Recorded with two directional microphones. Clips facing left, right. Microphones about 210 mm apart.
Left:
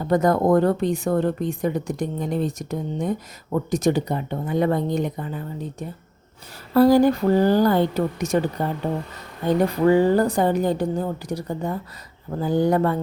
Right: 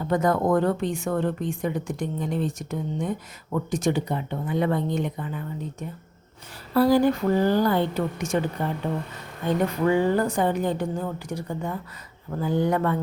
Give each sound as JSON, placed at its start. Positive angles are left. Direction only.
{"t": 0.0, "sound": "speech", "side_deg": 40}
{"t": 9.8, "sound": "speech", "side_deg": 35}